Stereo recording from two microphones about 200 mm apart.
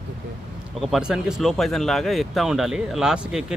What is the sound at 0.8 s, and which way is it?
Speech, centre (ahead or behind).